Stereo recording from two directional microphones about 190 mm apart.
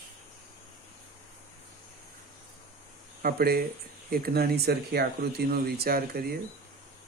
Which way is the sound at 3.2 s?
55° right (ahead or behind).